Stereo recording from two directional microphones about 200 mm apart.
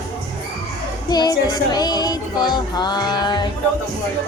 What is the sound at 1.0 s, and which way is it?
Speech, 20° left (ahead or behind).